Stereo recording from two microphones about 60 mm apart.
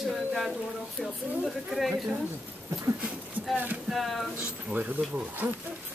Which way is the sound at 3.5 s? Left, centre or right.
Right.